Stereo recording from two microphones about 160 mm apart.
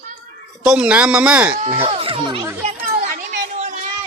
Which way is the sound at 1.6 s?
40° right (ahead or behind).